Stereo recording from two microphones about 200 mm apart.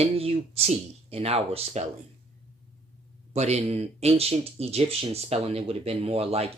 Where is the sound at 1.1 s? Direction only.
30° right (ahead or behind).